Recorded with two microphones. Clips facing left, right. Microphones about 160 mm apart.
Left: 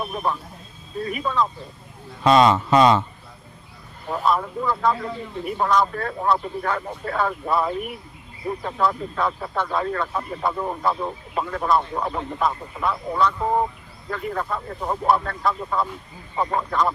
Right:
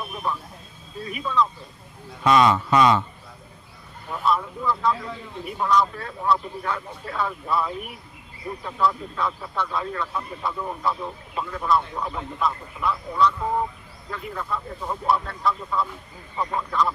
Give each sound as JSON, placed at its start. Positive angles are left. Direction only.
{"t": 0.0, "sound": "speech", "side_deg": 50}
{"t": 2.2, "sound": "speech", "side_deg": 30}
{"t": 4.1, "sound": "speech", "side_deg": 50}